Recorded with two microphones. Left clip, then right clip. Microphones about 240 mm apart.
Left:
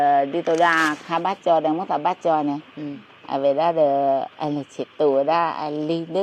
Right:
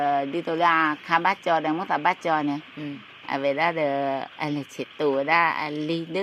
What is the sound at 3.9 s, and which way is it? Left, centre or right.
Speech, right.